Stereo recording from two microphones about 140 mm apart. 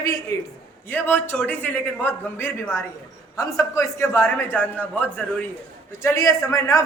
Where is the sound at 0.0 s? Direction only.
20° left (ahead or behind).